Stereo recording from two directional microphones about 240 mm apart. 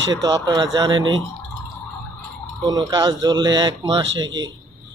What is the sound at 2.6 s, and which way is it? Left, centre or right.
Speech, centre.